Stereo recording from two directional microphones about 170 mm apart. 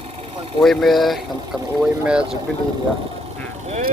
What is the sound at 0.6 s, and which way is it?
Speech, centre (ahead or behind).